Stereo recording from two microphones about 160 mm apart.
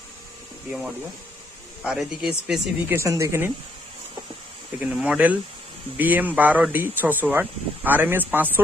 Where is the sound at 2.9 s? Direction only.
20° right (ahead or behind).